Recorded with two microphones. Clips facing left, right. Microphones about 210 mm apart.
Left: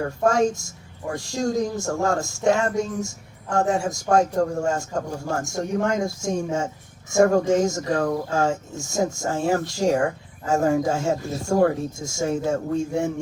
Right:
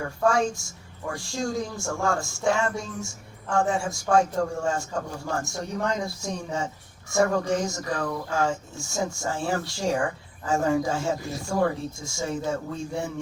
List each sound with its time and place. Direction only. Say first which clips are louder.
0.3 s speech: left 3 dB; 40° left (ahead or behind)